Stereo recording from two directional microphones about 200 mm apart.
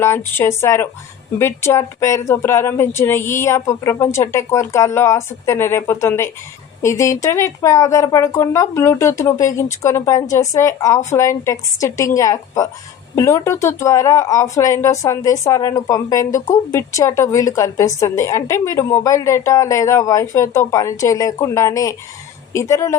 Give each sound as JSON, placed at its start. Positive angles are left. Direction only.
{"t": 0.0, "sound": "speech", "side_deg": 10}